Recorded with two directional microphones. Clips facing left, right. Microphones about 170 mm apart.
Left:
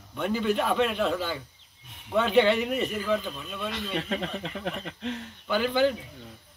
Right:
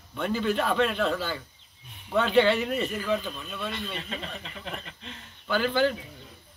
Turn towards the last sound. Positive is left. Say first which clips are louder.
# left 1 dB
turn(degrees=15)  # may be behind; listen again after turning